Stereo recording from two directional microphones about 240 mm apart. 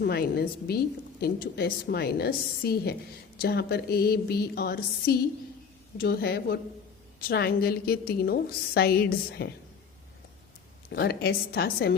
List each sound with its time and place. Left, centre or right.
0.0 s a woman's voice: left
10.9 s a woman's voice: left